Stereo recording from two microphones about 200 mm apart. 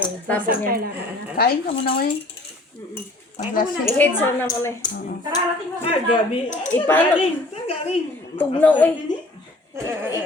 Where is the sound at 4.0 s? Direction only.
10° left (ahead or behind); by 6.7 s 30° left (ahead or behind).